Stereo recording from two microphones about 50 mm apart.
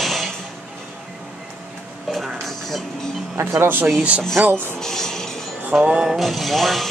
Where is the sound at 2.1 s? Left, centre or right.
Centre.